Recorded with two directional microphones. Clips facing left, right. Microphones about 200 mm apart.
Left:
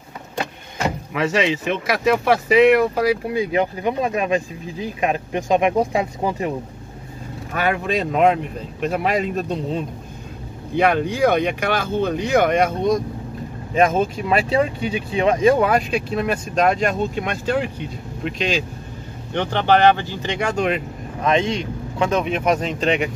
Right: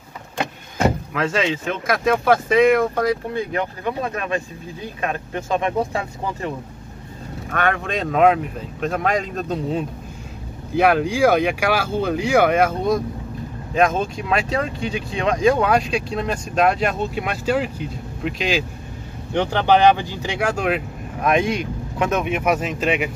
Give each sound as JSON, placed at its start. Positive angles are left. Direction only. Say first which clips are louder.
{"t": 1.1, "sound": "speech", "louder": "left 2 dB", "side_deg": 0}
{"t": 7.5, "sound": "speech", "louder": "left 1 dB", "side_deg": 5}
{"t": 21.2, "sound": "speech", "louder": "even", "side_deg": 25}
{"t": 22.1, "sound": "speech", "louder": "left 1 dB", "side_deg": -5}